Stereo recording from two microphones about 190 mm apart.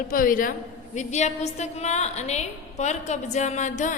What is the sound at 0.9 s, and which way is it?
A woman's voice, 35° left (ahead or behind).